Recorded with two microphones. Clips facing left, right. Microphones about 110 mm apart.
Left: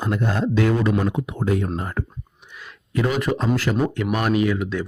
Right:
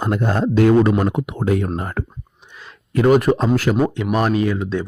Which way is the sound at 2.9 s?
50° right (ahead or behind).